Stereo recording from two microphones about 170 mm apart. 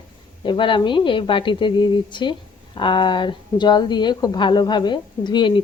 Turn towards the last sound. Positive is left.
turn(degrees=30)  # may be behind; listen again after turning